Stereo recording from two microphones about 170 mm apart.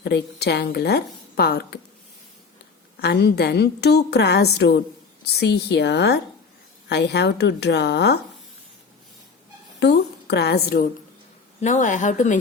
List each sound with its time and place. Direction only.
0.0 s a woman's voice: 80° left
3.0 s a woman's voice: 75° left (ahead or behind)
9.8 s a woman's voice: 75° left (ahead or behind)
11.6 s a woman's voice: 45° left (ahead or behind)